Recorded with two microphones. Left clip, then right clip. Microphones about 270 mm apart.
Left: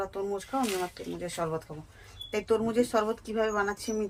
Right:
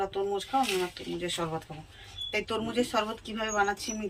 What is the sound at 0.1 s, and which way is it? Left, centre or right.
Speech, left.